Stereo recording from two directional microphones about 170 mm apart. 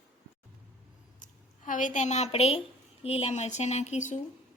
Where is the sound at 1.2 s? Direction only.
50° left (ahead or behind).